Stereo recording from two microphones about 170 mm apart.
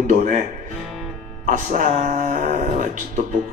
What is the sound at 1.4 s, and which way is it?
A man's voice, 50° right (ahead or behind).